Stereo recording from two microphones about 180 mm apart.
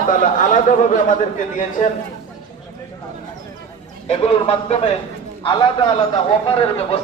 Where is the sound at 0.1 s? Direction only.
45° left (ahead or behind).